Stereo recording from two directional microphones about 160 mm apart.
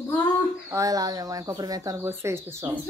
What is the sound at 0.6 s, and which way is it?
Speech, 20° right (ahead or behind).